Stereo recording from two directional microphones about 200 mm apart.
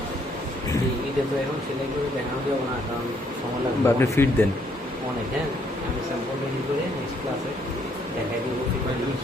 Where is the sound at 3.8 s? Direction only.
10° left (ahead or behind).